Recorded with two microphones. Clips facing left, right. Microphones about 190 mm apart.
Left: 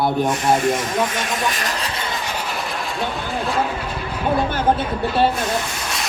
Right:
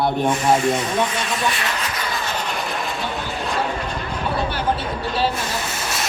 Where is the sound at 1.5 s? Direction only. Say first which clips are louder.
Even; 40° left (ahead or behind).